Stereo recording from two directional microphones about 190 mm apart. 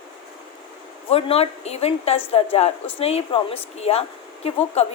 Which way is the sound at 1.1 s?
30° left (ahead or behind).